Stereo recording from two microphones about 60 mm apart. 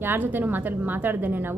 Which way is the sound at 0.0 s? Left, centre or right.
Right.